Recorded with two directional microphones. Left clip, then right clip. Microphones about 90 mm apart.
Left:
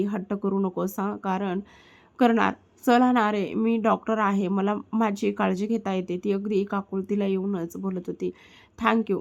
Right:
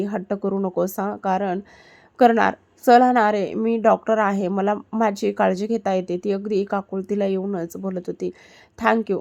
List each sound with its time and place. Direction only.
0.0 s a woman's voice: 35° right (ahead or behind)